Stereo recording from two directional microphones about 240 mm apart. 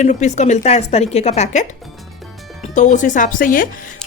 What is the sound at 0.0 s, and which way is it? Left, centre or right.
A woman's voice, left.